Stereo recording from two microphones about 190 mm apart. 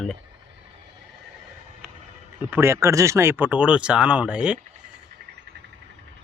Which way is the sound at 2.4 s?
10° right (ahead or behind).